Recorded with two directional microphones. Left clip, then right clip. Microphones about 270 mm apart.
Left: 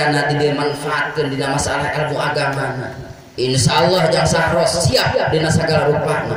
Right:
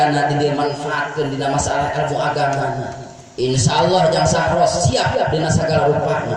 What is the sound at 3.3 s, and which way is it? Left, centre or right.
A man's voice, left.